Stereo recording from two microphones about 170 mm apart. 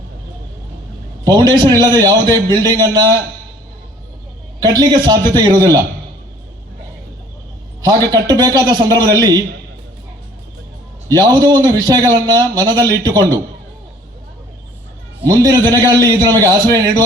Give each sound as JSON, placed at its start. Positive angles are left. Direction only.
{"t": 1.2, "sound": "a man's voice", "side_deg": -25}
{"t": 4.6, "sound": "a man's voice", "side_deg": -25}
{"t": 7.9, "sound": "a man's voice", "side_deg": -20}
{"t": 11.3, "sound": "a man's voice", "side_deg": -25}
{"t": 15.3, "sound": "a man's voice", "side_deg": -25}